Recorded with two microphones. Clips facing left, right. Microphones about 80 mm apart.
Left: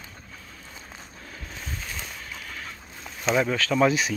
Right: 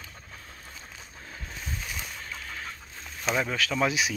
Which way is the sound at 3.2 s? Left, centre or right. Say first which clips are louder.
Left 5 dB; centre.